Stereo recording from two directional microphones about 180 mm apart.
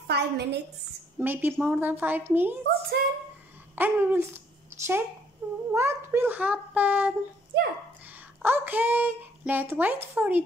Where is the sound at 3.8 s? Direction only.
10° right (ahead or behind).